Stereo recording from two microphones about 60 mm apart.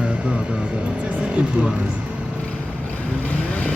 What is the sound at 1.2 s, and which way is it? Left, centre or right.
Speech, right.